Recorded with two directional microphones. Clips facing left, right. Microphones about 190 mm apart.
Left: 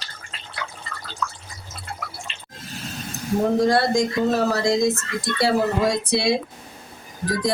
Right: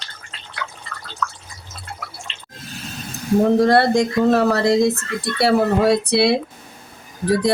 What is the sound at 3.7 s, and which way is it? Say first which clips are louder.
Speech: right 4 dB; 60° right (ahead or behind).